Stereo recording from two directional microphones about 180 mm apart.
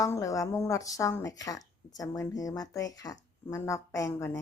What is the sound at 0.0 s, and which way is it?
Speech, 20° left (ahead or behind).